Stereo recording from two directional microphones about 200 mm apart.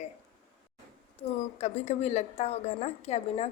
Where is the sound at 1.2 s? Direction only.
30° left (ahead or behind).